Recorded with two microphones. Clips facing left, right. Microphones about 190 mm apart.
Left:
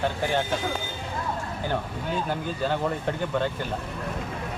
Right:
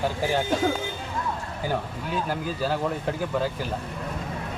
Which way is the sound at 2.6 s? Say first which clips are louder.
Even; 5° right (ahead or behind).